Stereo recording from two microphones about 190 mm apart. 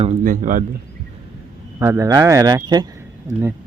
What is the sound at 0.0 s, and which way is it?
Speech, 40° right (ahead or behind).